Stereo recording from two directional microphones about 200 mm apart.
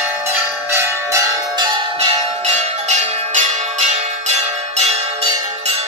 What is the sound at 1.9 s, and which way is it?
Bell, 35° right (ahead or behind).